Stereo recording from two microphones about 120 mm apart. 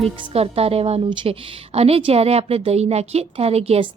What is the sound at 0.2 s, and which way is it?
A woman's voice, 55° right (ahead or behind).